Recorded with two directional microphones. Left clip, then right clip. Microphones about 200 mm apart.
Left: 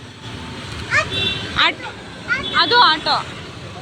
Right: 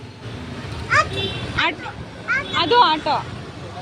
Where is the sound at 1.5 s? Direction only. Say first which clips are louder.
Left 4 dB; 20° right (ahead or behind).